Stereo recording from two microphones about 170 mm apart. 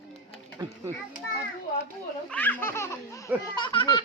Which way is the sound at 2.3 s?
10° left (ahead or behind).